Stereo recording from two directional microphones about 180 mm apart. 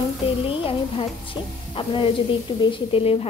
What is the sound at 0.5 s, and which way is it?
A woman's voice, 30° left (ahead or behind).